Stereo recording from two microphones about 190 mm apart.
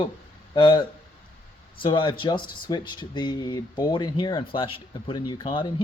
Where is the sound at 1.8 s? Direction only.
25° left (ahead or behind).